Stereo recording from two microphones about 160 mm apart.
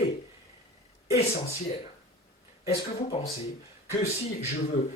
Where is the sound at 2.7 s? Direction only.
40° left (ahead or behind).